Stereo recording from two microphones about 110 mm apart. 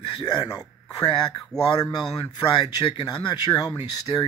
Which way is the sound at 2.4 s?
40° left (ahead or behind).